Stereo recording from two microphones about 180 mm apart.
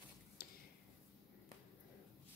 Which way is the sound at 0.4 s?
55° left (ahead or behind).